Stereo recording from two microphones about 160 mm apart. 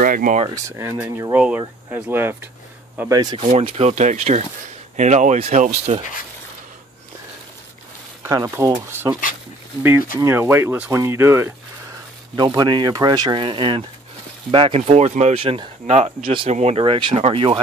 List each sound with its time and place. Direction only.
0.0 s speech: 60° right (ahead or behind)
0.7 s speech: 20° right (ahead or behind)
3.1 s speech: 25° right (ahead or behind)
3.4 s speech: 40° right (ahead or behind)
8.2 s speech: 20° right (ahead or behind)
10.1 s speech: 15° right (ahead or behind)
12.4 s speech: 25° right (ahead or behind)